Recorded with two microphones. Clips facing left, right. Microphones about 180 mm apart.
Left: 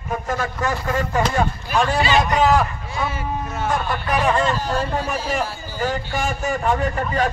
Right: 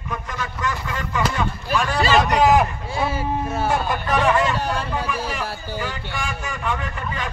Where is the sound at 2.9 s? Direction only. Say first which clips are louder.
Right 2 dB; 30° right (ahead or behind).